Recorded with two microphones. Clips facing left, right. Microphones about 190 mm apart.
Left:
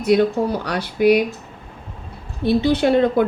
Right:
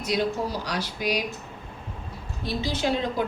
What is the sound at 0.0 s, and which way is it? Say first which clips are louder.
Speech: left 10 dB; 60° left (ahead or behind).